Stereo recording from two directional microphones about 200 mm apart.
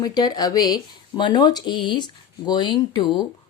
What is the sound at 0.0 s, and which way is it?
A woman's voice, 20° left (ahead or behind).